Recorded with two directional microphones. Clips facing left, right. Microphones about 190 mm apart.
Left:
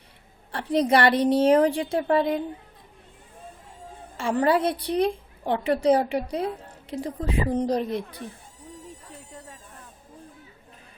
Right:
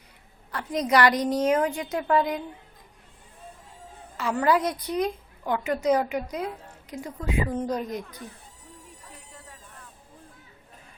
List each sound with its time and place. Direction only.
0.5 s a woman's voice: 30° left (ahead or behind)
4.2 s a woman's voice: 30° left (ahead or behind)